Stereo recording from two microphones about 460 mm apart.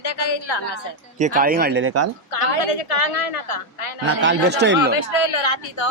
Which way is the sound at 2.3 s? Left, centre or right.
Left.